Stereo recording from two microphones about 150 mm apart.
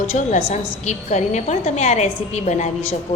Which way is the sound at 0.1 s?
50° left (ahead or behind).